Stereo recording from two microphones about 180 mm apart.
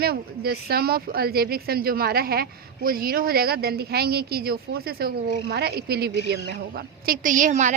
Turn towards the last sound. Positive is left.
turn(degrees=-45)  # may be behind; listen again after turning